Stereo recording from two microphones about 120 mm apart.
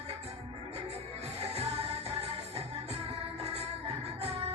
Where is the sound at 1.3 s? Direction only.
60° right (ahead or behind).